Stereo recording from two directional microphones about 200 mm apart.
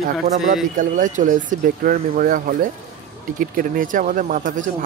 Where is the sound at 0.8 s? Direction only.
40° right (ahead or behind).